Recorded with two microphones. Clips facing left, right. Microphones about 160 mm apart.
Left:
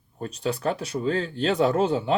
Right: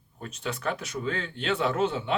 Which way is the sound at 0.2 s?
35° left (ahead or behind).